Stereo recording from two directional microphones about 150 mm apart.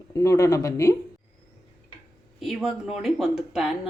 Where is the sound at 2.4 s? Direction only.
Centre (ahead or behind).